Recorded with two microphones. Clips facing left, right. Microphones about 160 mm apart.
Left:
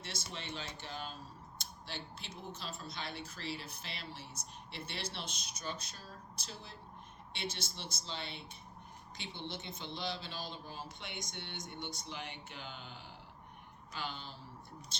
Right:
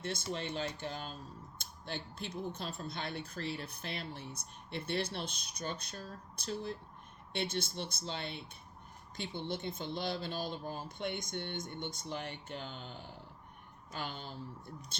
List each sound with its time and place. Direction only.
0.0 s speech: 50° right (ahead or behind)